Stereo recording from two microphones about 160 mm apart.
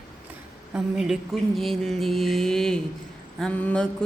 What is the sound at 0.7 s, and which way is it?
Mantra, centre (ahead or behind).